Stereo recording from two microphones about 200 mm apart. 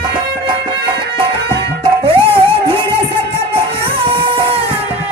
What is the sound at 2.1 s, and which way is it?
Music, 25° right (ahead or behind).